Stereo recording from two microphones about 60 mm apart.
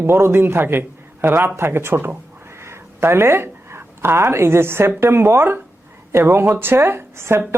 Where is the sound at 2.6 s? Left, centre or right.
Right.